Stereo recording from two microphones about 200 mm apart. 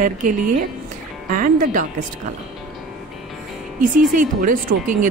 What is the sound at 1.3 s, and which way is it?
Speech, 40° right (ahead or behind).